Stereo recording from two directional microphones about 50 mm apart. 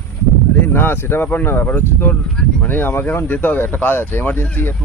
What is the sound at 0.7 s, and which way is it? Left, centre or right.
Speech, left.